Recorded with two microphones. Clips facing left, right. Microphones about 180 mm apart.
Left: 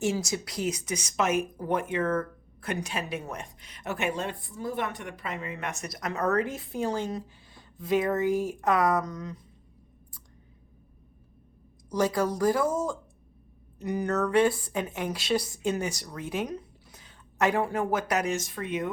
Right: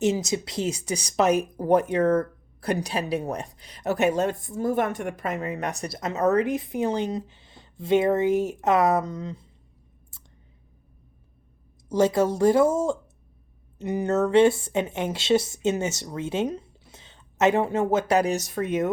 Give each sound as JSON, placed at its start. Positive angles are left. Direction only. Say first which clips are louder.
{"t": 0.0, "sound": "speech", "louder": "right 5 dB", "side_deg": -20}
{"t": 11.9, "sound": "speech", "louder": "right 5 dB", "side_deg": -25}